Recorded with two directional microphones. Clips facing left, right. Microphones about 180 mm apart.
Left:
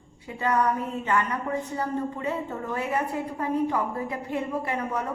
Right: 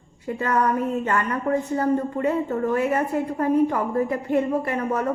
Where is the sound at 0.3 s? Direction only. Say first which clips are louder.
Right 2 dB; 45° right (ahead or behind).